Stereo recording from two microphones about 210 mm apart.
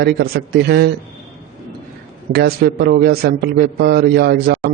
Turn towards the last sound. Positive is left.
turn(degrees=-50)  # may be behind; listen again after turning